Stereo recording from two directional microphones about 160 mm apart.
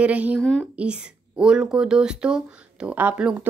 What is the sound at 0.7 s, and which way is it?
Speech, 5° right (ahead or behind).